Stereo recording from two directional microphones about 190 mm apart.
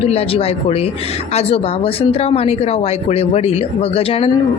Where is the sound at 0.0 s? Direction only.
30° left (ahead or behind).